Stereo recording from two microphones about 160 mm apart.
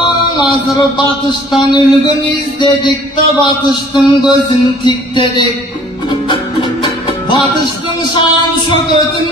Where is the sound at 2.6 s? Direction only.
30° left (ahead or behind).